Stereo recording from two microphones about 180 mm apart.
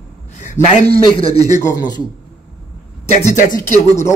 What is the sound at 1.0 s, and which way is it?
Speech, 30° left (ahead or behind).